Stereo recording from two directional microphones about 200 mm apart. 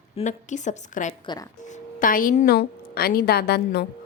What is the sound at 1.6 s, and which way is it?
A woman's voice, 40° left (ahead or behind).